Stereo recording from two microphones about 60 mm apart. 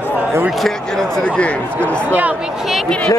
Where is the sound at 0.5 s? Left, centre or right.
Centre.